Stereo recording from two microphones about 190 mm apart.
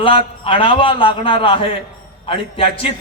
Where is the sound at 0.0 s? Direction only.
25° left (ahead or behind).